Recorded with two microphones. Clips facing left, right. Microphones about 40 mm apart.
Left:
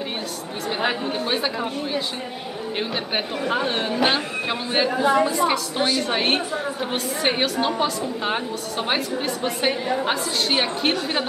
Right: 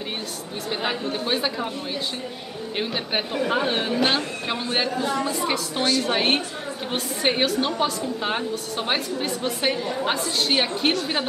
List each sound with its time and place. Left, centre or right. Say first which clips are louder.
0.7 s speech: left 3 dB; centre
4.9 s a woman's voice: left 6 dB; centre
5.3 s speech: left 4 dB; centre